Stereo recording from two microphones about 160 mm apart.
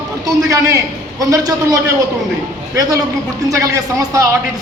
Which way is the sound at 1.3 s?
25° right (ahead or behind).